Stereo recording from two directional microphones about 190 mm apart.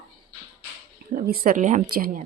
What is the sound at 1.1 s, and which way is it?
A woman's voice, 50° right (ahead or behind).